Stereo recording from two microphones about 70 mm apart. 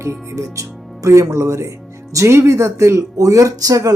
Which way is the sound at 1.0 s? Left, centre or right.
Right.